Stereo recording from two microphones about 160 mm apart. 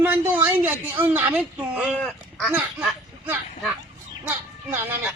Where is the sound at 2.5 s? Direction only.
10° right (ahead or behind).